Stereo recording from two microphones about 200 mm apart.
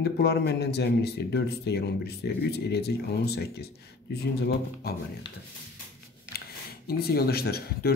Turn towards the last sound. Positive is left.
turn(degrees=50)  # may be behind; listen again after turning